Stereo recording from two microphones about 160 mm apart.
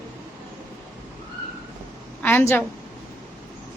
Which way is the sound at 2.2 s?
15° left (ahead or behind).